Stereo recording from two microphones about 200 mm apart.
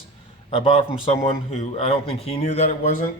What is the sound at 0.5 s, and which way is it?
A man's voice, 25° left (ahead or behind).